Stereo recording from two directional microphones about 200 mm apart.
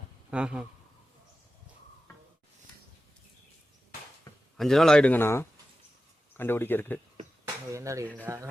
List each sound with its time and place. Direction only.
0.3 s speech: 5° right (ahead or behind)
4.5 s speech: centre (ahead or behind)
7.4 s a sound: 15° right (ahead or behind)
8.2 s speech: 15° right (ahead or behind)